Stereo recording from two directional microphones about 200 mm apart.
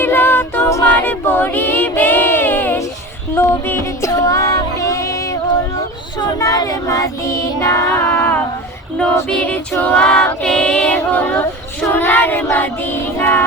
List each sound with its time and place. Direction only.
0.0 s a capella: 10° left (ahead or behind)
3.3 s music: 10° left (ahead or behind)
9.0 s a capella: 10° left (ahead or behind)